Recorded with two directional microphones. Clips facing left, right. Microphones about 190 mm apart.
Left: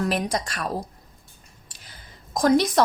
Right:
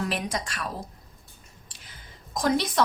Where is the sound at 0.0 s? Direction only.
40° left (ahead or behind).